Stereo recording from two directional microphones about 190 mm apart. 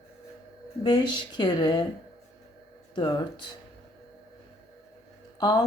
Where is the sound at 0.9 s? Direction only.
25° left (ahead or behind).